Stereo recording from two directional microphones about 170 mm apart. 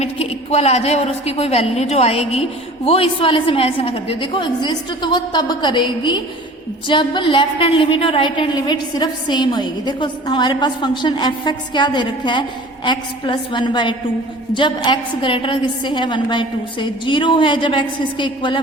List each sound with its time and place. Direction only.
0.0 s a woman's voice: 35° left (ahead or behind)